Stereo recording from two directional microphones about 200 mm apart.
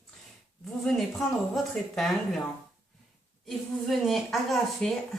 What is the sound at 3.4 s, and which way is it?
A woman's voice, centre (ahead or behind).